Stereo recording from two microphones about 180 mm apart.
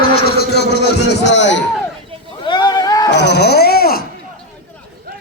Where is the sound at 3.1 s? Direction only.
70° left (ahead or behind).